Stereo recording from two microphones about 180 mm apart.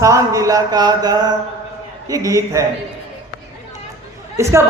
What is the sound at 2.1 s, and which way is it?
Speech, 20° right (ahead or behind).